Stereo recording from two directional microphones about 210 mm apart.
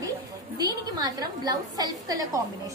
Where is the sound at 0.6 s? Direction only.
20° right (ahead or behind).